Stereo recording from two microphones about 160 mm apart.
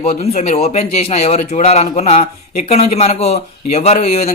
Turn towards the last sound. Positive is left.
turn(degrees=40)  # may be behind; listen again after turning